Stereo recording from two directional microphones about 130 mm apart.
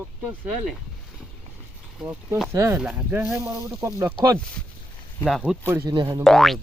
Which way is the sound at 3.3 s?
25° right (ahead or behind).